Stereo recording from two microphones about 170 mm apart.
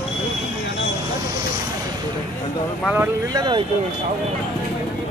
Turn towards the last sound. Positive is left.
turn(degrees=-25)  # may be behind; listen again after turning